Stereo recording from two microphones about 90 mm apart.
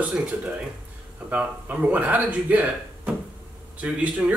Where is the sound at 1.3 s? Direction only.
15° right (ahead or behind).